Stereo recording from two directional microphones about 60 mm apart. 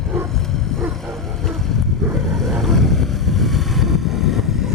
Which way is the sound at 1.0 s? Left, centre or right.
Centre.